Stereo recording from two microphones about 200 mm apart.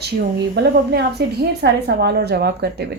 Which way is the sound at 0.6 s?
55° right (ahead or behind).